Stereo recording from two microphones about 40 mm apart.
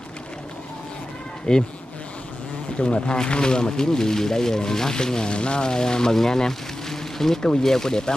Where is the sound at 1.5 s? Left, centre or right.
Centre.